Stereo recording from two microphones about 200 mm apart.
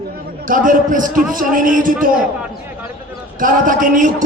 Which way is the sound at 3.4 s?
40° right (ahead or behind).